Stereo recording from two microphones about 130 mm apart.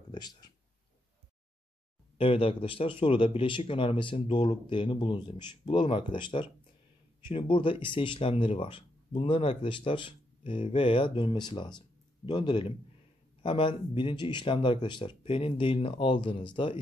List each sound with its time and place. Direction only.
0.1 s speech: 30° left (ahead or behind)
2.1 s speech: 45° left (ahead or behind)